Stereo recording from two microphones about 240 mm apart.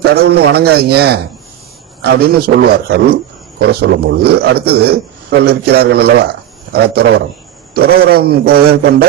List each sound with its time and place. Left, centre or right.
0.0 s a man's voice: right